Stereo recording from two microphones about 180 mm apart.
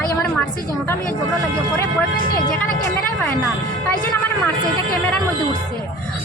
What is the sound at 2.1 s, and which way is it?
Speech, 55° left (ahead or behind).